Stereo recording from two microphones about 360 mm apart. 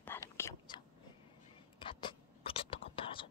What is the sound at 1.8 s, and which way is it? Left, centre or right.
Whispering, centre.